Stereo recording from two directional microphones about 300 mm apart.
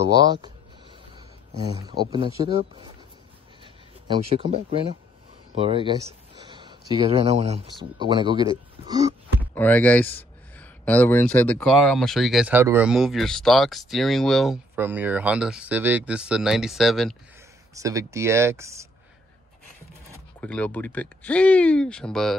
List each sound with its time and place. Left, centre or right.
0.1 s a man's voice: centre
9.4 s speech: centre
17.7 s speech: centre
20.3 s speech: centre